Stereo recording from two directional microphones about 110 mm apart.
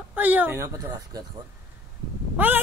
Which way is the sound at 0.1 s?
15° right (ahead or behind).